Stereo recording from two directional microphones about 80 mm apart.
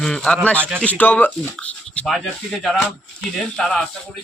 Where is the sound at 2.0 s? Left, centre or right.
Centre.